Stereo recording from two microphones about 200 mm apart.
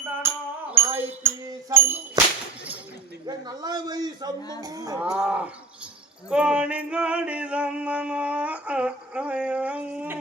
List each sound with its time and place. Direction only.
0.2 s music: 10° right (ahead or behind)
0.7 s a sound: 10° right (ahead or behind)
3.2 s a man's voice: 20° right (ahead or behind)
4.6 s music: 15° right (ahead or behind)
4.9 s male singing: 5° right (ahead or behind)